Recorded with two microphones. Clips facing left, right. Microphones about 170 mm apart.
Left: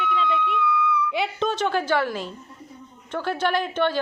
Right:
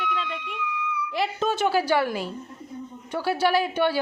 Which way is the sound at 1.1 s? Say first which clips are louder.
Even; centre (ahead or behind).